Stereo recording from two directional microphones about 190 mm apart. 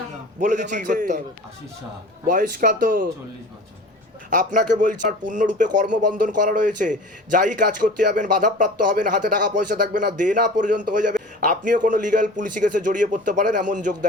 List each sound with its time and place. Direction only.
0.3 s a man's voice: 40° right (ahead or behind)
2.2 s a man's voice: 50° right (ahead or behind)
4.3 s a man's voice: 45° right (ahead or behind)